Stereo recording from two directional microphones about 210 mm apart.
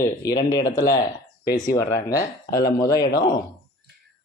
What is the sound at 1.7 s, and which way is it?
Speech, 15° left (ahead or behind).